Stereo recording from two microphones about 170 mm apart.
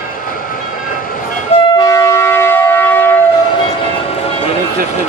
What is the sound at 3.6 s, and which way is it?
Train, 35° left (ahead or behind).